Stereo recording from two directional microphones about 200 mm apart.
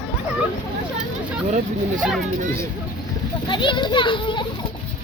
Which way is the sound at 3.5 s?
25° left (ahead or behind).